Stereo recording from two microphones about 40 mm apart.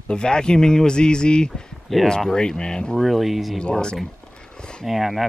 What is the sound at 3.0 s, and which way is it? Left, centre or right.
Speech, centre.